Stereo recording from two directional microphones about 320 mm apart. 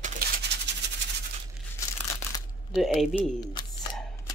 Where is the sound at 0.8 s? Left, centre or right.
Right.